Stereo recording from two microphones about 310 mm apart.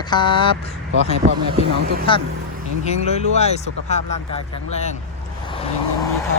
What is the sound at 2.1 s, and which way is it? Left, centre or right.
Speech, centre.